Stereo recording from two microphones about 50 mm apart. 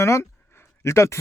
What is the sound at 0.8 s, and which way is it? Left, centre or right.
Speech, left.